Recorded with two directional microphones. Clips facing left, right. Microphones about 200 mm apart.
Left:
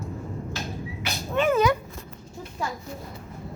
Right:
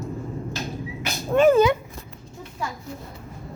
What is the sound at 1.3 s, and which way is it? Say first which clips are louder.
Dog: right 7 dB; 40° right (ahead or behind).